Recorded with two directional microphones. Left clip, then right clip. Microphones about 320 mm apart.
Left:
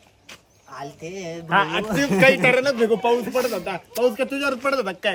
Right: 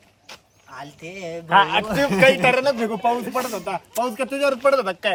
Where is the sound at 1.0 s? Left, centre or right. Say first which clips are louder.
Right 4 dB; centre.